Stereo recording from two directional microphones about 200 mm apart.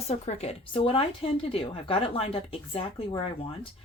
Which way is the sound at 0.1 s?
30° left (ahead or behind).